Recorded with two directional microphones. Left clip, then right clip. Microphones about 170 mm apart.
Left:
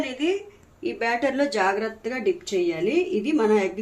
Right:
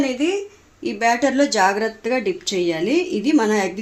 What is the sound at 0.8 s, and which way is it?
A woman's voice, 55° right (ahead or behind).